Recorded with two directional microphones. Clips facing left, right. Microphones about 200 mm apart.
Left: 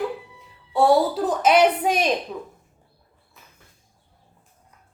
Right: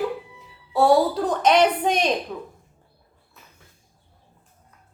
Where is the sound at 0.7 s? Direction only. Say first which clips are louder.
Even; centre (ahead or behind).